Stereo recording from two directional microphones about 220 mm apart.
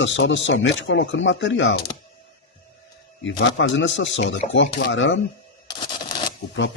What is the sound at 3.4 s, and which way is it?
Speech, 55° left (ahead or behind).